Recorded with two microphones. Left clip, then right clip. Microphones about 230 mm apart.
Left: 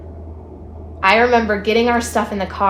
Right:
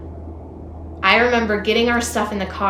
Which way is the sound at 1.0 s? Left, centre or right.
Centre.